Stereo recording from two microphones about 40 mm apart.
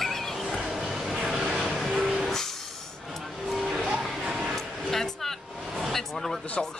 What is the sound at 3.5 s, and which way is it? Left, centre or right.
Music, centre.